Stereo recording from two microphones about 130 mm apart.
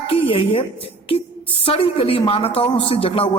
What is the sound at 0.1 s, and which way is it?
Speech, 45° left (ahead or behind).